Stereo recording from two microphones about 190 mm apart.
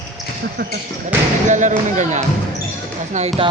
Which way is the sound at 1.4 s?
40° right (ahead or behind).